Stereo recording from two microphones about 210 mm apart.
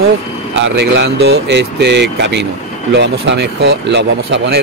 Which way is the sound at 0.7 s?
55° right (ahead or behind).